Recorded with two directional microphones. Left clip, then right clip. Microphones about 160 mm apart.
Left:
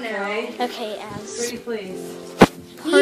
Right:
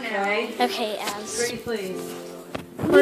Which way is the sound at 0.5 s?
10° right (ahead or behind).